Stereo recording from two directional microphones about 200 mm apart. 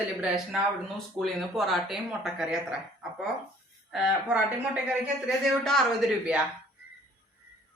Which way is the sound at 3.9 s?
5° right (ahead or behind).